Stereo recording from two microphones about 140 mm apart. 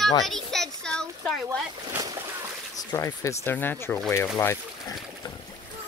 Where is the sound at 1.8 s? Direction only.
25° right (ahead or behind).